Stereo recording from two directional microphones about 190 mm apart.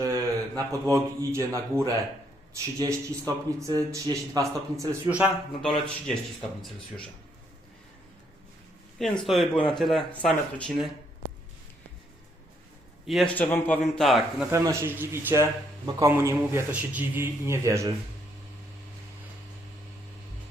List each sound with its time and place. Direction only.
0.0 s a man's voice: 15° right (ahead or behind)
9.0 s a man's voice: centre (ahead or behind)
13.1 s a man's voice: 5° left (ahead or behind)
14.5 s a man's voice: 15° right (ahead or behind)